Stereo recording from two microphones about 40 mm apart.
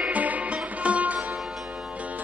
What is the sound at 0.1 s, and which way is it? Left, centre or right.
Music, right.